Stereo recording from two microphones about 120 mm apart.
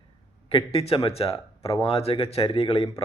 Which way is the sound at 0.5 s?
55° left (ahead or behind).